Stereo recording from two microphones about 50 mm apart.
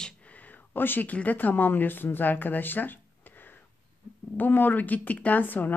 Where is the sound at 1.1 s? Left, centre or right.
Left.